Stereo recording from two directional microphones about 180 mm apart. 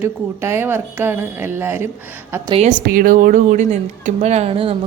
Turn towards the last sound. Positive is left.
turn(degrees=-30)  # may be behind; listen again after turning